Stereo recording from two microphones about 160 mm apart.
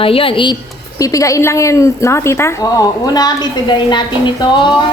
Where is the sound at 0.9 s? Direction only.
20° left (ahead or behind).